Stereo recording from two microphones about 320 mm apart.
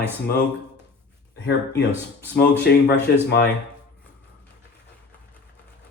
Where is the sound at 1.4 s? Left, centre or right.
Left.